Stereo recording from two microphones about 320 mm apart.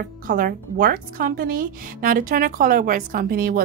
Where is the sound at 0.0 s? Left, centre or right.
Right.